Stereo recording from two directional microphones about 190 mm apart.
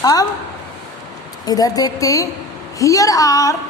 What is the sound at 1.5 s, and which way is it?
A woman's voice, 20° left (ahead or behind).